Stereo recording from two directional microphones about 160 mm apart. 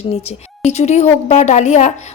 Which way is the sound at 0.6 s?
45° left (ahead or behind).